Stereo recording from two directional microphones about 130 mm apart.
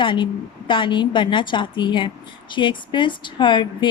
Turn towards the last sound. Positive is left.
turn(degrees=40)  # may be behind; listen again after turning